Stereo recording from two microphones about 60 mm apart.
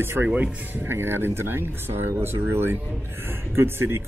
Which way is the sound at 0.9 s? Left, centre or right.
Right.